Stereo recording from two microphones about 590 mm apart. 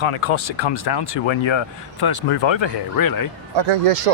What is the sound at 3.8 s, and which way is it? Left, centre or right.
Speech, right.